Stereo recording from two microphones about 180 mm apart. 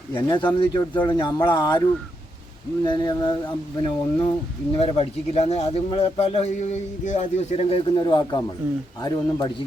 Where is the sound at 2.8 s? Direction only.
25° left (ahead or behind).